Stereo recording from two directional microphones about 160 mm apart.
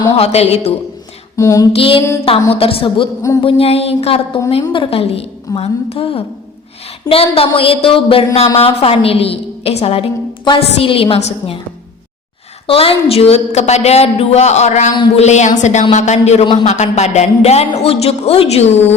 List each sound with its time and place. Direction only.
0.2 s a woman's voice: 40° left (ahead or behind)
1.4 s female singing: 20° left (ahead or behind)
1.7 s a woman's voice: 35° left (ahead or behind)
12.6 s a woman's voice: 35° left (ahead or behind)